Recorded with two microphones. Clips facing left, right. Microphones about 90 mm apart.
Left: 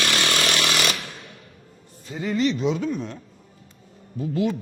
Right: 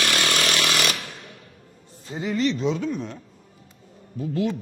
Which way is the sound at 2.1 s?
20° right (ahead or behind).